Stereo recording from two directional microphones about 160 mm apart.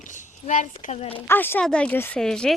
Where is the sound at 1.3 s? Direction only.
15° left (ahead or behind).